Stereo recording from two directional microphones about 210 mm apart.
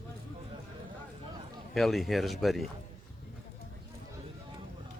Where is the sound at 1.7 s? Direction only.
Centre (ahead or behind).